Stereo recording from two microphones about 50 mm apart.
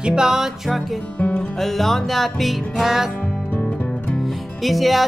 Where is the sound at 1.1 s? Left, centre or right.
Left.